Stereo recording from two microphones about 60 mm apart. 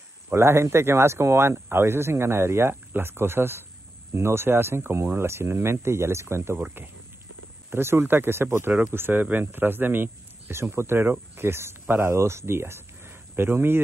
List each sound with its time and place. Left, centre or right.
0.3 s speech: right
10.6 s speech: right